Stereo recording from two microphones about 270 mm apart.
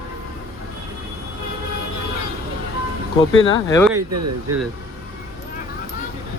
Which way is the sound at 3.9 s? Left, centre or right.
Right.